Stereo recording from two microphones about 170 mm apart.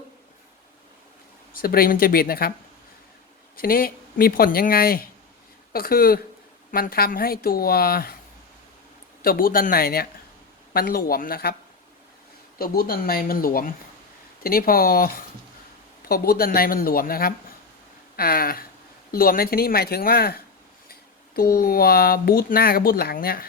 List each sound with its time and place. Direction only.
1.5 s speech: 60° left (ahead or behind)
3.6 s speech: 60° left (ahead or behind)
9.2 s speech: 60° left (ahead or behind)
12.5 s speech: 60° left (ahead or behind)